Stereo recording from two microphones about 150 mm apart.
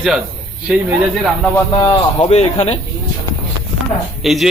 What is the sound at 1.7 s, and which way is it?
Speech, 35° left (ahead or behind).